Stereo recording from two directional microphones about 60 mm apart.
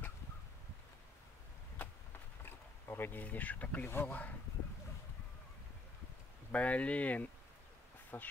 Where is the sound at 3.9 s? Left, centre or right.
Left.